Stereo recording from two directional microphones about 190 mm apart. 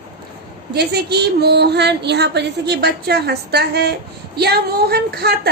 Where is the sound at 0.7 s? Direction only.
60° right (ahead or behind).